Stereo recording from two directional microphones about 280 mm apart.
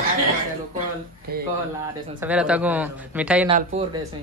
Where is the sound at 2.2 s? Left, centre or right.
Centre.